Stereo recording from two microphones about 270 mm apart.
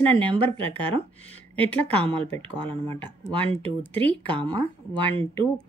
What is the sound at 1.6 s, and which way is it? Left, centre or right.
Speech, centre.